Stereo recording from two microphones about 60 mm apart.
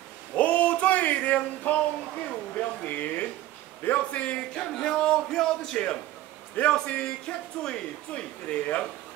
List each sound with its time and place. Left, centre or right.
0.4 s male singing: left
2.5 s speech: left